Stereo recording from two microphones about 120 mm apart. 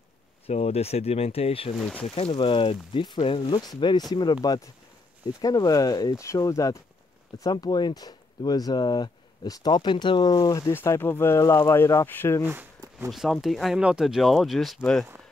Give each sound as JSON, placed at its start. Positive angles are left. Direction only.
{"t": 0.5, "sound": "speech", "side_deg": 60}
{"t": 1.8, "sound": "speech", "side_deg": 5}
{"t": 2.0, "sound": "speech", "side_deg": 50}
{"t": 10.7, "sound": "speech", "side_deg": 20}
{"t": 12.4, "sound": "speech", "side_deg": -15}
{"t": 13.1, "sound": "speech", "side_deg": 0}